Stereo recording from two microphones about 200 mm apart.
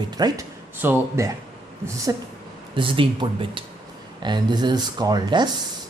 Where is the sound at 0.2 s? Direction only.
15° right (ahead or behind).